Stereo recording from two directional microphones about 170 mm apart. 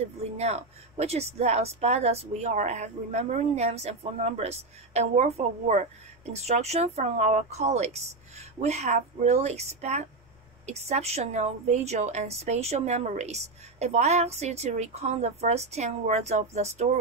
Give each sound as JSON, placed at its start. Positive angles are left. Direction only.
{"t": 0.2, "sound": "a woman's voice", "side_deg": -40}